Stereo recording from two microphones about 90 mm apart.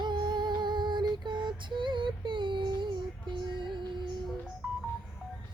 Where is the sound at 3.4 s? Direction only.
60° right (ahead or behind).